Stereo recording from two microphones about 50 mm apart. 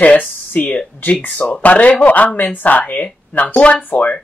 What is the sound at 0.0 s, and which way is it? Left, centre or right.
Speech, left.